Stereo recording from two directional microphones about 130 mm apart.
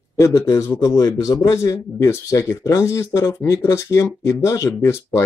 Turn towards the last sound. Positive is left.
turn(degrees=20)  # may be behind; listen again after turning